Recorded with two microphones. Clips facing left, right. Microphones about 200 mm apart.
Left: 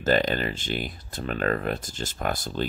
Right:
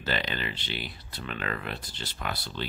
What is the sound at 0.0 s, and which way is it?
Speech, 45° left (ahead or behind).